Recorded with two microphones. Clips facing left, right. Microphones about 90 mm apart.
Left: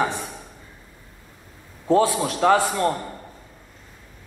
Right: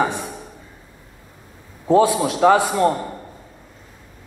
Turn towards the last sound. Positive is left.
turn(degrees=-10)  # may be behind; listen again after turning